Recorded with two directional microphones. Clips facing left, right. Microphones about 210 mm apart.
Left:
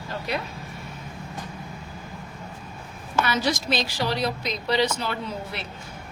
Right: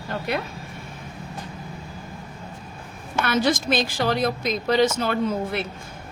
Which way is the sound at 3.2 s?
55° right (ahead or behind).